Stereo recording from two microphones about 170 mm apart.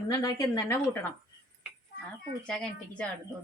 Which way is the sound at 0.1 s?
20° left (ahead or behind).